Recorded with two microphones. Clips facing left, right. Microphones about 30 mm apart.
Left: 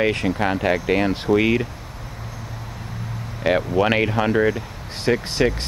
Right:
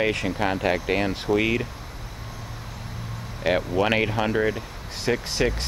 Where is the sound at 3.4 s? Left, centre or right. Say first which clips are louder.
Left 3 dB; centre.